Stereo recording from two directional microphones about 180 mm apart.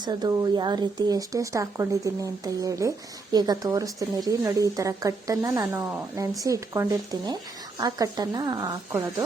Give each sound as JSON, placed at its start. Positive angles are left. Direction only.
{"t": 0.0, "sound": "speech", "side_deg": -25}